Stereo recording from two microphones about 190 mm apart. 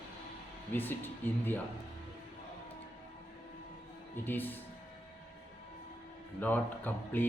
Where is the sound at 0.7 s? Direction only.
10° left (ahead or behind).